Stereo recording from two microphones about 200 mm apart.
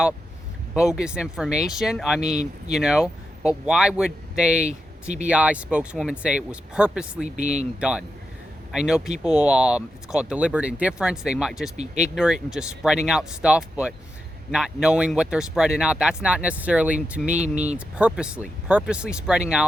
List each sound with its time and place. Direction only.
0.7 s speech: 5° right (ahead or behind)
7.3 s speech: 35° right (ahead or behind)
7.8 s speech: 5° right (ahead or behind)